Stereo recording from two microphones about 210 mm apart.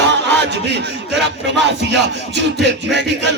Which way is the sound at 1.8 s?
55° right (ahead or behind).